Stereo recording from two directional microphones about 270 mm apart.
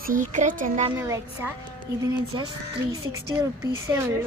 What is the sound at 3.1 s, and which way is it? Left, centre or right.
Speech, centre.